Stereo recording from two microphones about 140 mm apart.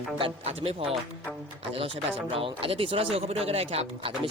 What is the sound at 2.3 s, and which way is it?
Speech, 40° right (ahead or behind).